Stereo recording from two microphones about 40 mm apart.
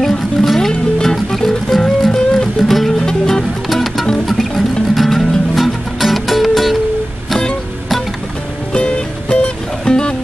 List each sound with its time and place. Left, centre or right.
0.4 s music: centre
3.0 s music: centre
3.6 s music: centre
8.7 s music: left